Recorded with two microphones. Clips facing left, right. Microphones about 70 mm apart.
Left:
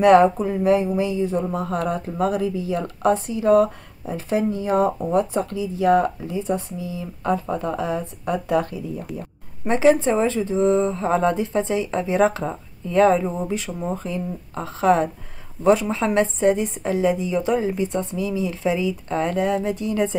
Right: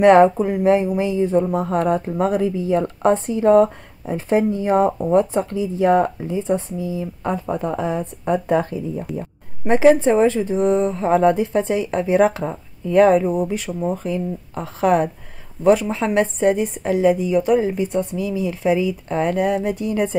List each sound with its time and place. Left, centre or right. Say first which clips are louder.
0.0 s speech: right 2 dB; right
17.1 s speech: right 4 dB; centre
17.6 s speech: right 3 dB; right